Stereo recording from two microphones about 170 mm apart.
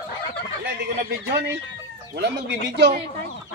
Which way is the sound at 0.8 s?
70° right (ahead or behind).